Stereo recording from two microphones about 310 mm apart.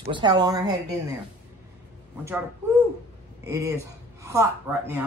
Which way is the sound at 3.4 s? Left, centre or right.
Centre.